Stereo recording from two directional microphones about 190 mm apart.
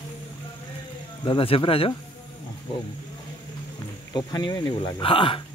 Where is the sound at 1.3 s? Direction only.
30° left (ahead or behind).